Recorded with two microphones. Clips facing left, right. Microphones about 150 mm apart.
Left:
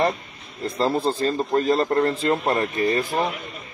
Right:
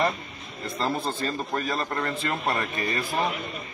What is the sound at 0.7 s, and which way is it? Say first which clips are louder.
A man's voice: left 6 dB; 35° left (ahead or behind).